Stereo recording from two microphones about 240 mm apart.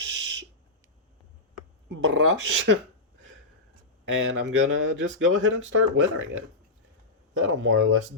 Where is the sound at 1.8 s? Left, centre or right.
Right.